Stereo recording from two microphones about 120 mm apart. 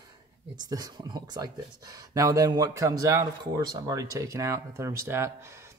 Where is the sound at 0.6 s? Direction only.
35° right (ahead or behind).